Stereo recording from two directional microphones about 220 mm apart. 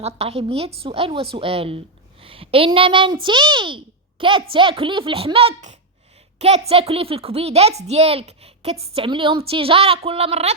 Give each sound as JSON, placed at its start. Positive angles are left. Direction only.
{"t": 0.0, "sound": "a woman's voice", "side_deg": -30}